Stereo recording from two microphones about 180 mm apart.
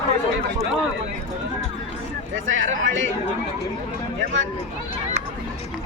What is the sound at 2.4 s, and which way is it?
Speech, 90° right.